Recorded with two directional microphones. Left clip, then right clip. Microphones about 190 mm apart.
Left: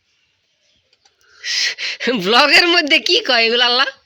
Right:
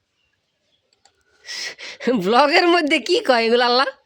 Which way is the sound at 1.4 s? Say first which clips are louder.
Left 11 dB; 15° right (ahead or behind).